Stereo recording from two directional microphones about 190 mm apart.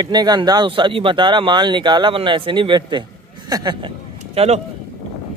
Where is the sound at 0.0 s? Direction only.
20° right (ahead or behind).